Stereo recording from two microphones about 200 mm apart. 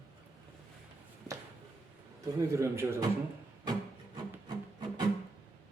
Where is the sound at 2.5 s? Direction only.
15° right (ahead or behind).